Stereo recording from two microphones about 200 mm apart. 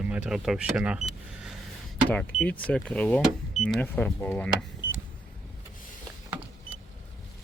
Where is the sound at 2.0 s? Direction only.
5° left (ahead or behind).